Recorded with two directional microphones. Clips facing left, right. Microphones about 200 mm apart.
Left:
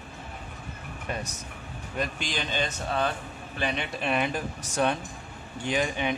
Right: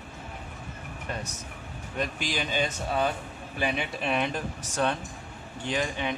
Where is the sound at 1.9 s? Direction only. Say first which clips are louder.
Even; centre (ahead or behind); by 6.1 s 15° left (ahead or behind).